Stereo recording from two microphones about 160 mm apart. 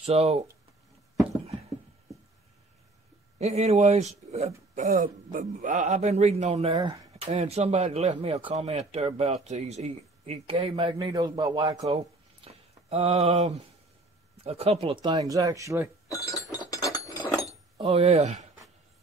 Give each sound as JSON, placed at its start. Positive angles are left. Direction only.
{"t": 0.0, "sound": "speech", "side_deg": -40}
{"t": 3.3, "sound": "speech", "side_deg": -45}
{"t": 7.2, "sound": "speech", "side_deg": -45}
{"t": 11.0, "sound": "speech", "side_deg": -25}
{"t": 12.4, "sound": "a sound", "side_deg": -40}
{"t": 14.4, "sound": "speech", "side_deg": -40}
{"t": 16.1, "sound": "speech", "side_deg": 20}
{"t": 16.5, "sound": "a sound", "side_deg": 20}
{"t": 17.7, "sound": "speech", "side_deg": -40}